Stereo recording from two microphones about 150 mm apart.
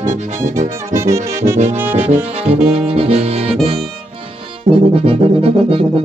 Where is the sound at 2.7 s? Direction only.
45° right (ahead or behind).